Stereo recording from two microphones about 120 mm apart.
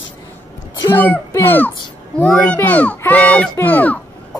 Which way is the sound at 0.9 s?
15° left (ahead or behind).